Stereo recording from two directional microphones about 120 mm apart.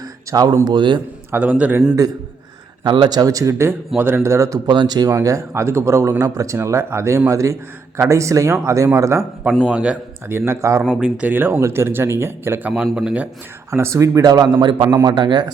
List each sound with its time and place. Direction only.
0.3 s speech: 30° right (ahead or behind)
1.3 s a man's voice: 10° right (ahead or behind)
2.8 s speech: 40° right (ahead or behind); by 9.2 s 25° right (ahead or behind)
9.6 s a man's voice: 5° right (ahead or behind)
10.2 s speech: 20° right (ahead or behind)
11.0 s speech: 15° right (ahead or behind); by 15.4 s 40° right (ahead or behind)